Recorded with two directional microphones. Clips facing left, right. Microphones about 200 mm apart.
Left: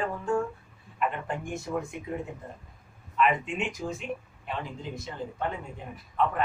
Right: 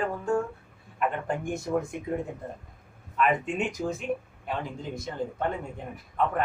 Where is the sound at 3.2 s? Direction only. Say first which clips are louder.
Right 1 dB; 45° right (ahead or behind).